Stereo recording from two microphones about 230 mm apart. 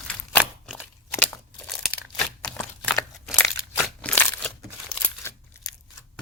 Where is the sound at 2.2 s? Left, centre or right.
Centre.